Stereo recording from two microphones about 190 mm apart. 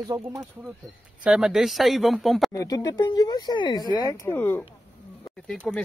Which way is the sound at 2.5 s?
20° left (ahead or behind).